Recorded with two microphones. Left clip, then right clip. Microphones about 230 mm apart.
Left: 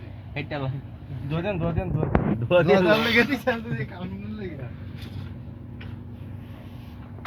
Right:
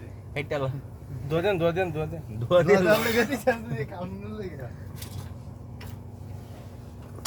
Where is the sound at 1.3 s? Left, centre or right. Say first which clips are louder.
Right 4 dB; right.